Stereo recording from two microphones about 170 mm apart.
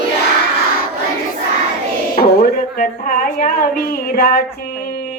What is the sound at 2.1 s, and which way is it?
A woman's voice, 60° left (ahead or behind).